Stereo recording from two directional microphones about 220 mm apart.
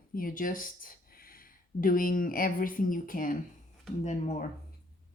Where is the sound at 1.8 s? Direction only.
40° left (ahead or behind).